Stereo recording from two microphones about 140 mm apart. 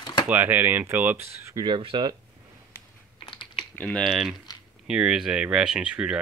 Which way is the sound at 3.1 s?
35° left (ahead or behind).